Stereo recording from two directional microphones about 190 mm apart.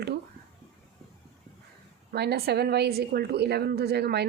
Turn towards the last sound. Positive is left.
turn(degrees=-60)  # may be behind; listen again after turning